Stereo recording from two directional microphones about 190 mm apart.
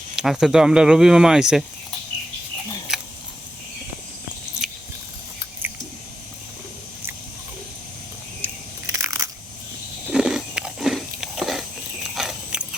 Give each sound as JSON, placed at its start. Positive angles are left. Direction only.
{"t": 0.2, "sound": "speech", "side_deg": -5}
{"t": 2.9, "sound": "a sound", "side_deg": 0}
{"t": 8.4, "sound": "biting", "side_deg": -10}
{"t": 9.0, "sound": "crushing", "side_deg": -15}
{"t": 10.1, "sound": "biting", "side_deg": -5}